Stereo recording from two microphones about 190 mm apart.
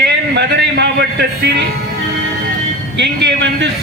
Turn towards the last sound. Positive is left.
turn(degrees=-65)  # may be behind; listen again after turning